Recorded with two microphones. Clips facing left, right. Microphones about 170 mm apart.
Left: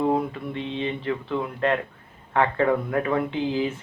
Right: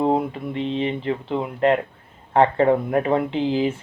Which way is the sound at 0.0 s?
25° right (ahead or behind).